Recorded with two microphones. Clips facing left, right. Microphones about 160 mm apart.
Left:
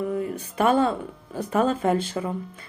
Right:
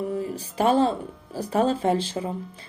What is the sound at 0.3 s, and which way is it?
Speech, 35° right (ahead or behind).